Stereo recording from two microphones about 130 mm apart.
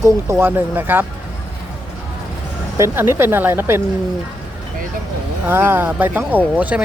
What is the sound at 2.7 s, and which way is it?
Speech, 20° right (ahead or behind).